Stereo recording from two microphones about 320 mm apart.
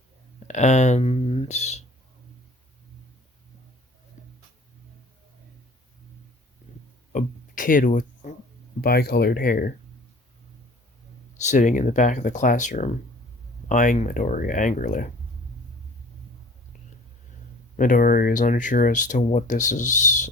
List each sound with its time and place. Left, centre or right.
0.4 s speech: left
4.2 s a sound: left
7.1 s a sound: left
8.8 s speech: left
11.3 s speech: left
17.7 s speech: left